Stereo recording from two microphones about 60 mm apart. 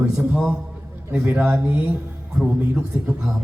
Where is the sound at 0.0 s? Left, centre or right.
Right.